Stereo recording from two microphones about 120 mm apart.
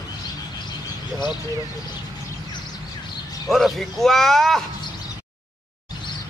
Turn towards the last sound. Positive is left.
turn(degrees=0)  # may be behind; listen again after turning